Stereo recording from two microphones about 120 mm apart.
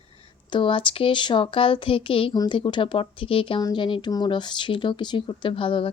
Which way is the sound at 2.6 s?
45° left (ahead or behind).